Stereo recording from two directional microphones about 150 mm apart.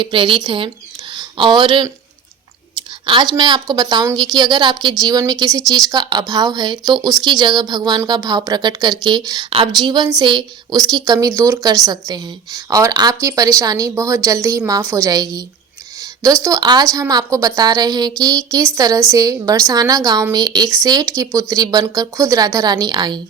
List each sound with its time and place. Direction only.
0.0 s speech: 35° right (ahead or behind)
3.1 s a woman's voice: 30° right (ahead or behind)